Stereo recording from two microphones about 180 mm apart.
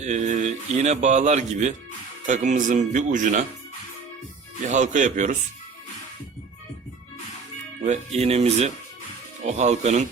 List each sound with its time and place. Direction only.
0.0 s speech: 40° right (ahead or behind)
4.6 s speech: 40° right (ahead or behind)
7.9 s speech: 35° right (ahead or behind)